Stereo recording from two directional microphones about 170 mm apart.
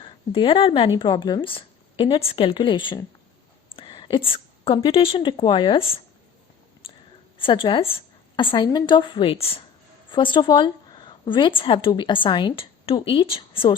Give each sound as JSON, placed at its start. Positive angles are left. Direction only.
{"t": 0.0, "sound": "a woman's voice", "side_deg": 30}
{"t": 7.3, "sound": "a woman's voice", "side_deg": 30}